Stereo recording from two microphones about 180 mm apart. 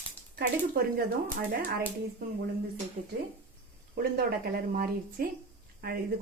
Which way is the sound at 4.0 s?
60° right (ahead or behind).